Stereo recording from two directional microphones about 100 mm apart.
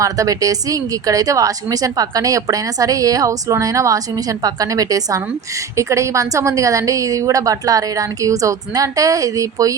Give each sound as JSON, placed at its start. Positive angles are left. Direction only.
{"t": 0.0, "sound": "a woman's voice", "side_deg": -35}